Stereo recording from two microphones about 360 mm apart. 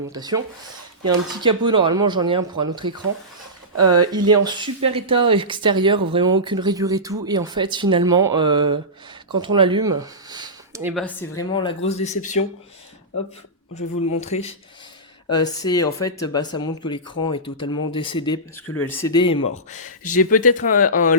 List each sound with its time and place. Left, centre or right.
0.1 s speech: centre
3.8 s speech: right
4.4 s speech: centre
14.2 s speech: centre